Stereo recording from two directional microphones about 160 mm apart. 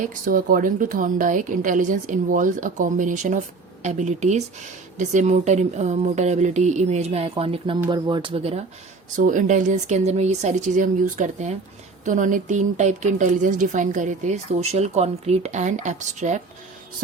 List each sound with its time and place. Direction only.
0.0 s a woman's voice: 55° right (ahead or behind); by 8.6 s 40° right (ahead or behind)
9.1 s a woman's voice: 55° right (ahead or behind)